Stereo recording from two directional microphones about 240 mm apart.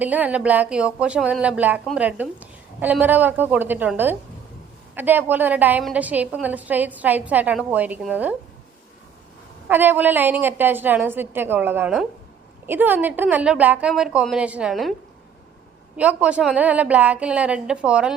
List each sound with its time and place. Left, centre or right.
0.0 s speech: centre
9.6 s a woman's voice: centre
16.0 s a woman's voice: centre